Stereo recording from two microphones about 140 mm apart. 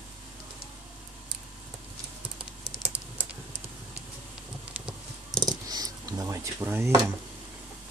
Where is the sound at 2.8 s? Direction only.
10° right (ahead or behind).